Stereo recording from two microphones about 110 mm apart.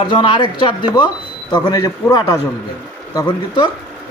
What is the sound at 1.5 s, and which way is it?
Speech, 35° left (ahead or behind).